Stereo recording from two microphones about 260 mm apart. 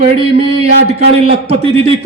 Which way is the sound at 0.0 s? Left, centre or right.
Right.